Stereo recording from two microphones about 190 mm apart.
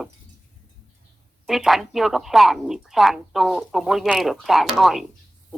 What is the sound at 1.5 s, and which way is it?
Speech, centre (ahead or behind).